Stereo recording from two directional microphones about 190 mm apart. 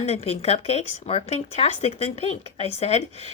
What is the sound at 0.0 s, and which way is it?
Speech, 35° left (ahead or behind).